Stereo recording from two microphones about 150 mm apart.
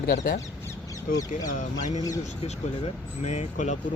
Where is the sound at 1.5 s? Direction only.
55° left (ahead or behind).